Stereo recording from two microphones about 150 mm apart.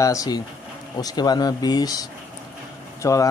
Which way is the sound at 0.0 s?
20° left (ahead or behind).